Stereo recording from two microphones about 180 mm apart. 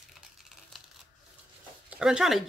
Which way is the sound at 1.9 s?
5° right (ahead or behind).